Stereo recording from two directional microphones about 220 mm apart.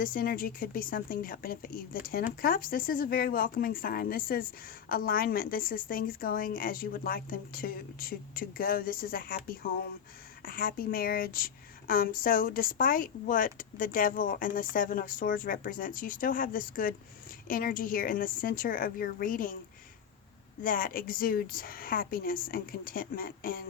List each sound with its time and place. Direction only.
0.0 s a woman's voice: 40° left (ahead or behind)
20.6 s a woman's voice: 40° left (ahead or behind)